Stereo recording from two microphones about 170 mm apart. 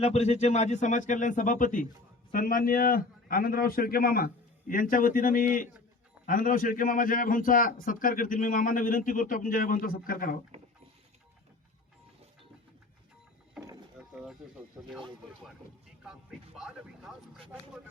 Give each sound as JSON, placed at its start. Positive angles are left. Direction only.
{"t": 0.0, "sound": "a man's voice", "side_deg": 40}
{"t": 10.5, "sound": "a sound", "side_deg": -40}
{"t": 16.6, "sound": "speech", "side_deg": -5}